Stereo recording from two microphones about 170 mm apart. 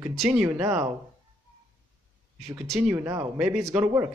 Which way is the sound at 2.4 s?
5° right (ahead or behind).